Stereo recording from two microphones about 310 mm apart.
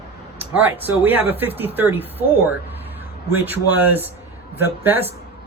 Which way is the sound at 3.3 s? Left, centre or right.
Centre.